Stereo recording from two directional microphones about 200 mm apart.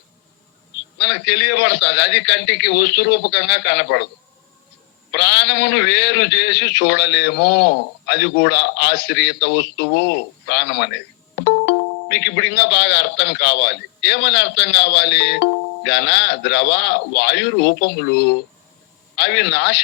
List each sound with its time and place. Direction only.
0.9 s speech: 60° left (ahead or behind)
5.1 s speech: 60° left (ahead or behind)